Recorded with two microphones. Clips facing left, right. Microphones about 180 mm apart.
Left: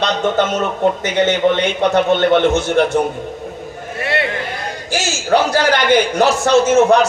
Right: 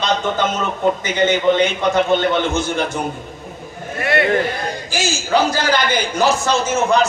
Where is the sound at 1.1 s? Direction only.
70° left (ahead or behind).